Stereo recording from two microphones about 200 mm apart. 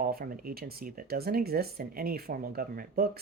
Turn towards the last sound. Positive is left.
turn(degrees=-50)  # may be behind; listen again after turning